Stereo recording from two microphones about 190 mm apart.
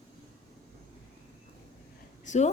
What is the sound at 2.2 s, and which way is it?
Speech, 40° left (ahead or behind).